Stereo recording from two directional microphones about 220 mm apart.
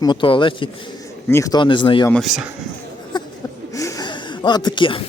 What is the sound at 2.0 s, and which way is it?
Speech, centre (ahead or behind).